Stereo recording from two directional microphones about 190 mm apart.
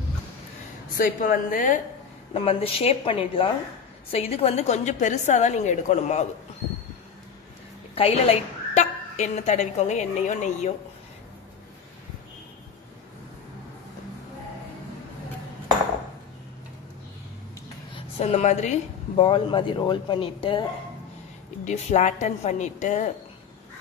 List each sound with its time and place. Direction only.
0.9 s a woman's voice: 50° left (ahead or behind)
2.3 s a woman's voice: 30° left (ahead or behind)
7.9 s a woman's voice: 35° left (ahead or behind)
17.9 s a woman's voice: 35° left (ahead or behind)
21.6 s a woman's voice: 35° left (ahead or behind)